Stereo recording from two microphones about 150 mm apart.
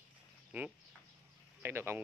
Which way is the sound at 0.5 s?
10° right (ahead or behind).